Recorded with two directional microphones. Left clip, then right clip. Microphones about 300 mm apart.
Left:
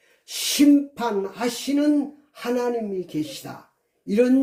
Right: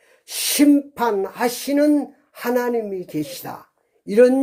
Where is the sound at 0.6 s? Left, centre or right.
Right.